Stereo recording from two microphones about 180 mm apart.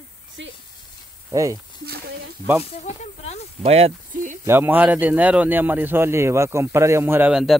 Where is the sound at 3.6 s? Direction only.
35° right (ahead or behind).